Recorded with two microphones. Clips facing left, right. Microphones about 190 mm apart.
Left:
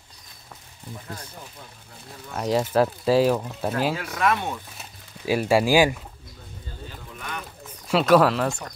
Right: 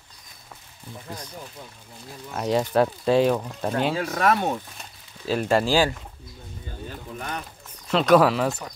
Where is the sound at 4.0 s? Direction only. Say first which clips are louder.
Right 2 dB; 40° right (ahead or behind).